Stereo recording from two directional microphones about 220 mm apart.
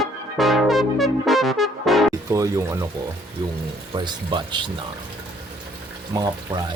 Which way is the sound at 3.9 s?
20° right (ahead or behind).